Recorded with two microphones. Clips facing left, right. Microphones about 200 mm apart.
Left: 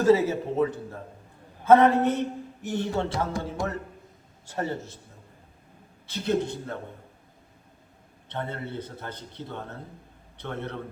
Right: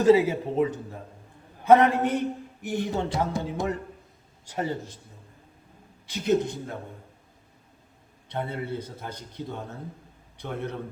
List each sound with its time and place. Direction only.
0.0 s speech: 15° right (ahead or behind)
6.1 s speech: 15° right (ahead or behind)
8.3 s a man's voice: 10° right (ahead or behind)